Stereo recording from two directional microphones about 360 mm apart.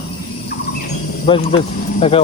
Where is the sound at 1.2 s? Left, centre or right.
Centre.